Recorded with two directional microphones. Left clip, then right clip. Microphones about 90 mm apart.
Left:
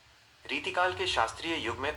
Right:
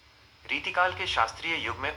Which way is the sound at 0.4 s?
45° left (ahead or behind).